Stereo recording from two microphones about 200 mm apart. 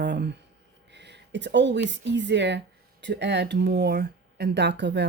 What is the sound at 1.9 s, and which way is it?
Speech, 60° right (ahead or behind).